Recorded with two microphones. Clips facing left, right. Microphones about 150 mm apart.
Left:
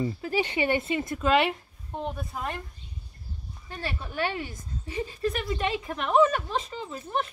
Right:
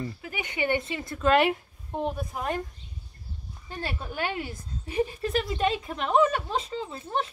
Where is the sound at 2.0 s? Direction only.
15° right (ahead or behind).